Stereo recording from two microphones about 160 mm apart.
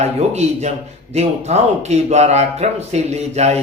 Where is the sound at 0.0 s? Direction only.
45° right (ahead or behind).